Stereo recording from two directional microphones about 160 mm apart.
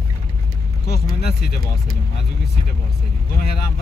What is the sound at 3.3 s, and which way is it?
Speech, 75° left (ahead or behind).